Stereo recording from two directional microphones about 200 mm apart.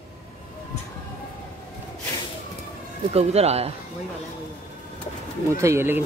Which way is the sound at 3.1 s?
30° right (ahead or behind).